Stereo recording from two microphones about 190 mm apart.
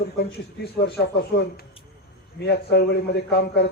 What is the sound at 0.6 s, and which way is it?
A man's voice, 60° left (ahead or behind).